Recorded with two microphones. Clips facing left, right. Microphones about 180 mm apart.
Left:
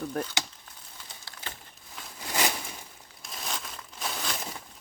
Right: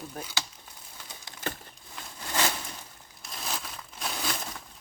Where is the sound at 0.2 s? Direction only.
65° left (ahead or behind).